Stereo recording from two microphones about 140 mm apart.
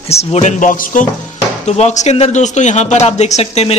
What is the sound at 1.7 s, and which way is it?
A man's voice, 55° left (ahead or behind).